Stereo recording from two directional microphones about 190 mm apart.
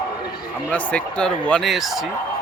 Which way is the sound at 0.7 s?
5° left (ahead or behind).